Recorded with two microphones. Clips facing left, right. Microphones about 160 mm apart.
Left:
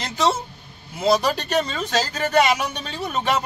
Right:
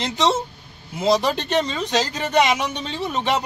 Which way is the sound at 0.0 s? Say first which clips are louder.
Right 1 dB; 20° right (ahead or behind).